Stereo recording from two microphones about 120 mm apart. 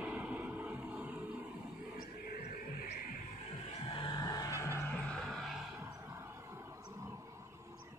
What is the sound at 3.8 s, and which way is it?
Music, 40° left (ahead or behind).